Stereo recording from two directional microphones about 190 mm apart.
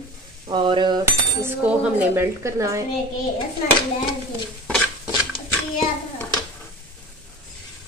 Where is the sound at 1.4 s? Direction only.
10° right (ahead or behind).